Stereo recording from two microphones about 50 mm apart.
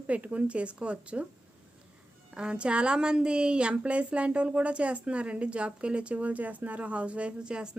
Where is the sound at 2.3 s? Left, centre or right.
Right.